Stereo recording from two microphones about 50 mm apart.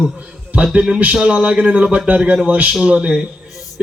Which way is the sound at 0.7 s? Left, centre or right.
Centre.